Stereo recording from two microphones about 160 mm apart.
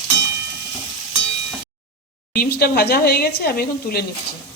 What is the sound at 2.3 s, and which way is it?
Speech, 75° left (ahead or behind).